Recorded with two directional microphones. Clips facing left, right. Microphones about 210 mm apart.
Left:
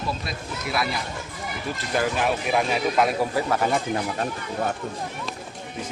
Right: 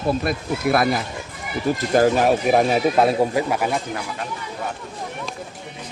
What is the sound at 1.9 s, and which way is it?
Speech, 45° right (ahead or behind).